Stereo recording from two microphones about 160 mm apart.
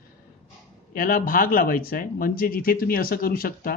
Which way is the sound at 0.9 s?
60° left (ahead or behind).